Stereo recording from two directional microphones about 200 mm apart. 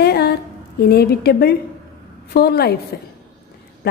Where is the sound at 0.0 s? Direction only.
50° left (ahead or behind).